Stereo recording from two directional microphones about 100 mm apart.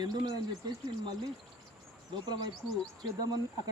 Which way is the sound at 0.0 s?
45° right (ahead or behind).